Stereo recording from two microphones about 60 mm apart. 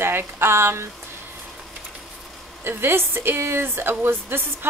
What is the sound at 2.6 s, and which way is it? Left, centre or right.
Speech, right.